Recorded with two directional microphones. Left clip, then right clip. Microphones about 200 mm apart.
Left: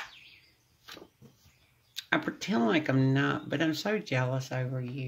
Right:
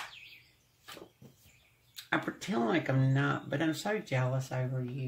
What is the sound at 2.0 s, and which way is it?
Speech, 40° left (ahead or behind).